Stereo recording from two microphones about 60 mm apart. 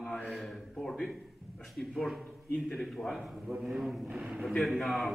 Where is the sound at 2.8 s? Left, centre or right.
Centre.